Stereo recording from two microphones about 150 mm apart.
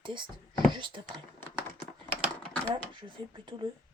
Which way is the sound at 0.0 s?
30° right (ahead or behind).